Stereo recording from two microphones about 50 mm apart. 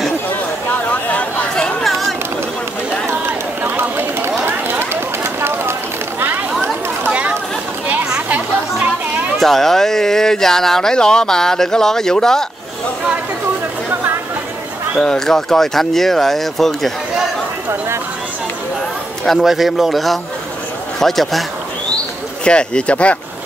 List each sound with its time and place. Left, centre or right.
1.0 s chatter: left
1.5 s chatter: centre
3.1 s run: right
4.5 s a sound: right
7.1 s chatter: right
9.4 s speech: centre
15.0 s speech: centre
15.2 s speech: centre
19.2 s speech: centre
22.4 s speech: centre